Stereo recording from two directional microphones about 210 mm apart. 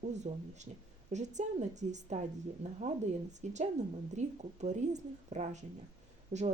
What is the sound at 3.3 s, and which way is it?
Speech, 35° right (ahead or behind).